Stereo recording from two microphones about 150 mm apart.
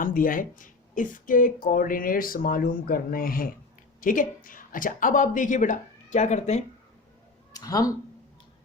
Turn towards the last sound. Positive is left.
turn(degrees=25)  # may be behind; listen again after turning